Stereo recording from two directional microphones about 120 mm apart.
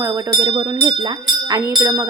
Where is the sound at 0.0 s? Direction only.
25° right (ahead or behind).